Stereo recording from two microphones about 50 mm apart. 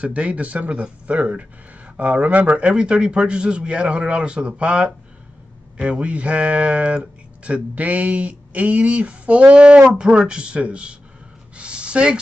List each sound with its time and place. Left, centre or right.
0.0 s speech: right
2.7 s speech: centre
11.5 s a sound: right